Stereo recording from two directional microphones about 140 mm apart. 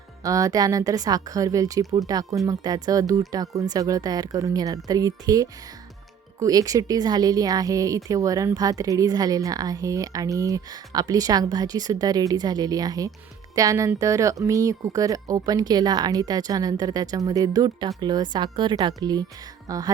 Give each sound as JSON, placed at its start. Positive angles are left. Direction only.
{"t": 0.2, "sound": "speech", "side_deg": -25}